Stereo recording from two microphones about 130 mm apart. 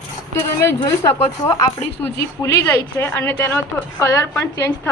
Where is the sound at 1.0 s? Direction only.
25° left (ahead or behind).